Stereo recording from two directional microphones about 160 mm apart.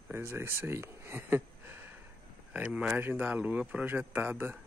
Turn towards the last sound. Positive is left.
turn(degrees=-15)  # may be behind; listen again after turning